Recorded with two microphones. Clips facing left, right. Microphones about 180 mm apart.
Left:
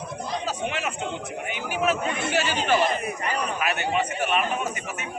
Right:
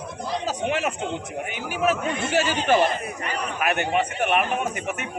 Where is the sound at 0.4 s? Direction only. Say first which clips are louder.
Right 6 dB; 45° right (ahead or behind).